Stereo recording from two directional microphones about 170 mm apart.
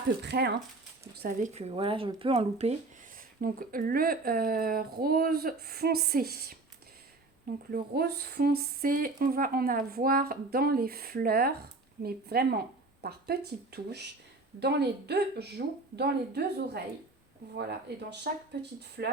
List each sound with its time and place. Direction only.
0.2 s speech: 80° right
1.4 s speech: 40° right (ahead or behind)
3.4 s speech: 55° right (ahead or behind)
7.7 s speech: 65° right (ahead or behind)